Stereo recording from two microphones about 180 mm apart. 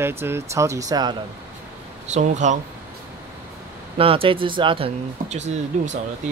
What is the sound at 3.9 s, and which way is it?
Speech, 30° right (ahead or behind).